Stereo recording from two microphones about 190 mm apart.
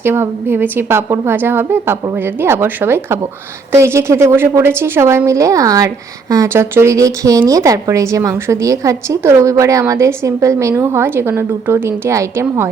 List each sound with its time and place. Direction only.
0.0 s a woman's voice: 10° right (ahead or behind)